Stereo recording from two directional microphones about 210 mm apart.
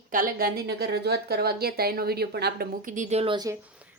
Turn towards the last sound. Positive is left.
turn(degrees=-20)  # may be behind; listen again after turning